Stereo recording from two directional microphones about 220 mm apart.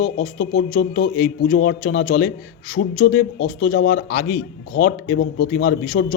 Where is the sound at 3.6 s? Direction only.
40° left (ahead or behind).